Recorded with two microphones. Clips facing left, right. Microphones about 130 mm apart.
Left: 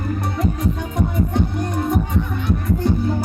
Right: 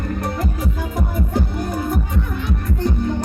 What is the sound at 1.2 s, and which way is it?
Music, centre (ahead or behind).